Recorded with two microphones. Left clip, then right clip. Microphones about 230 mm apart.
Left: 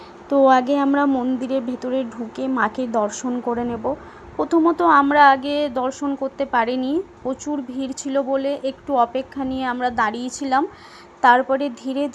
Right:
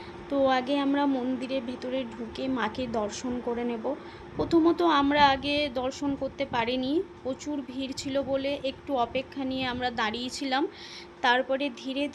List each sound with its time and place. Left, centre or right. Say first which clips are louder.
0.3 s a woman's voice: left 10 dB; left